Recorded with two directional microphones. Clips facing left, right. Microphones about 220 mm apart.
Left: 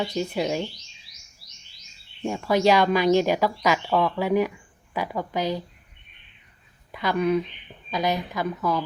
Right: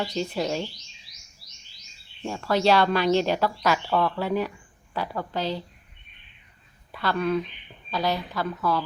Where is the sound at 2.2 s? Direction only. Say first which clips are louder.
Left 3 dB; 15° left (ahead or behind).